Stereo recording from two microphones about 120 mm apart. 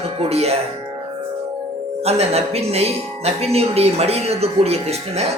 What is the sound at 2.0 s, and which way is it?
Speech, 60° right (ahead or behind).